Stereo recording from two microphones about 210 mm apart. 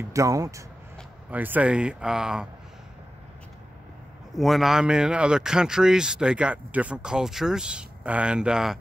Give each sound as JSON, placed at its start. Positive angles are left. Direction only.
{"t": 0.1, "sound": "speech", "side_deg": -15}
{"t": 4.3, "sound": "speech", "side_deg": 0}